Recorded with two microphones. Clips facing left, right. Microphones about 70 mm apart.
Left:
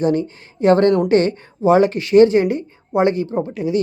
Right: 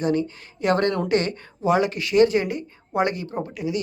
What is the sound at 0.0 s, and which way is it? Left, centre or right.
Speech, left.